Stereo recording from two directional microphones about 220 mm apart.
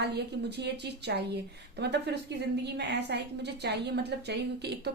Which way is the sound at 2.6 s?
50° right (ahead or behind).